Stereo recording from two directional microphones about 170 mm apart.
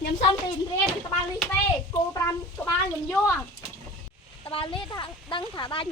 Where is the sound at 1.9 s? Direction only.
15° left (ahead or behind).